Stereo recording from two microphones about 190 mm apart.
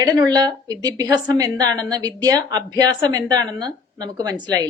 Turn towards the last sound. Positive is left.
turn(degrees=-20)  # may be behind; listen again after turning